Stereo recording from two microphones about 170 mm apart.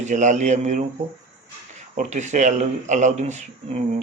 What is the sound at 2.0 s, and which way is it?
Speech, 45° right (ahead or behind).